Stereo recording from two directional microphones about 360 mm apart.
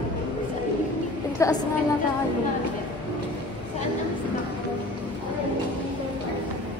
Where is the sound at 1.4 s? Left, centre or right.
Centre.